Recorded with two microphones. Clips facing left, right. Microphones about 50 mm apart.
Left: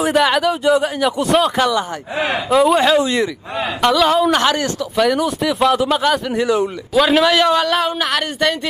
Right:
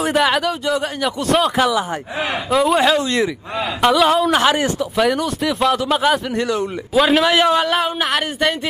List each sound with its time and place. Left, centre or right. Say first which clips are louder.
0.0 s speech: left 2 dB; centre
2.1 s speech: left 4 dB; left
2.5 s speech: left 2 dB; centre
4.6 s speech: right 1 dB; centre
4.9 s a man's voice: left 4 dB; centre